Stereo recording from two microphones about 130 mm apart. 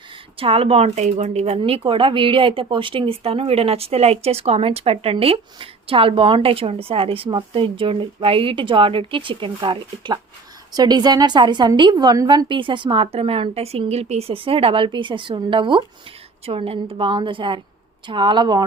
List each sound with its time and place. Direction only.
0.3 s a woman's voice: 50° right (ahead or behind)